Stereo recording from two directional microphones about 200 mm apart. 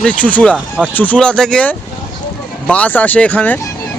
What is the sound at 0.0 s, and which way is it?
Speech, 5° left (ahead or behind).